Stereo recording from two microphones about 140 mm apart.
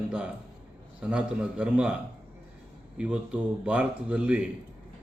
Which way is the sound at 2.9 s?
5° right (ahead or behind).